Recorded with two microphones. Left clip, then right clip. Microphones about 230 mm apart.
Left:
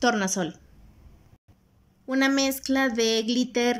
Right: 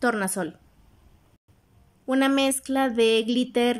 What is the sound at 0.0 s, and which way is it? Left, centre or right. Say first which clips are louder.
Speech: left 1 dB; centre.